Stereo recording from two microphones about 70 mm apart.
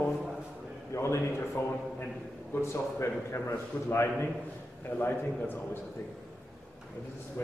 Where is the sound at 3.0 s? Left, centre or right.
Left.